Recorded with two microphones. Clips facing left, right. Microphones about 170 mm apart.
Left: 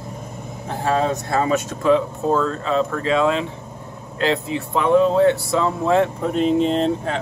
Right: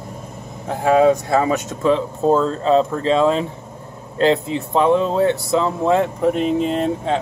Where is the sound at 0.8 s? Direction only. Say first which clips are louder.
Right 7 dB; 15° right (ahead or behind).